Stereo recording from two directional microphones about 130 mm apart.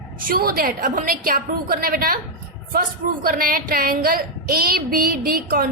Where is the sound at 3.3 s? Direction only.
90° right.